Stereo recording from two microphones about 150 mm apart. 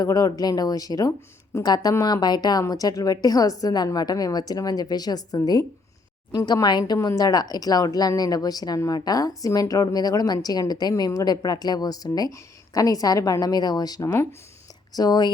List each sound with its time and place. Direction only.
0.0 s speech: 25° left (ahead or behind)